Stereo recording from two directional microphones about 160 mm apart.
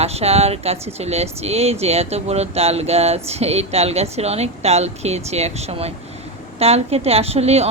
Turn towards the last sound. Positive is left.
turn(degrees=-40)  # may be behind; listen again after turning